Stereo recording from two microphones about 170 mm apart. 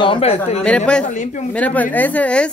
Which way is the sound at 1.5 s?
10° left (ahead or behind).